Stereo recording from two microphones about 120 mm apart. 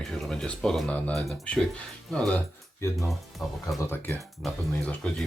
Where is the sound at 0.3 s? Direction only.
5° left (ahead or behind).